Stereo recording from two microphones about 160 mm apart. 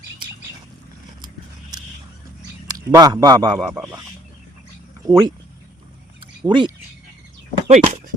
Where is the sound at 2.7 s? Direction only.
25° right (ahead or behind).